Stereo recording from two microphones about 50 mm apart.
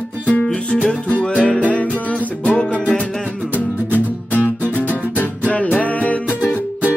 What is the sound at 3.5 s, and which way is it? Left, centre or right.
Music, left.